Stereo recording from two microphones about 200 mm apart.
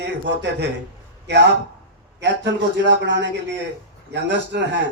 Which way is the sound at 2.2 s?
60° right (ahead or behind).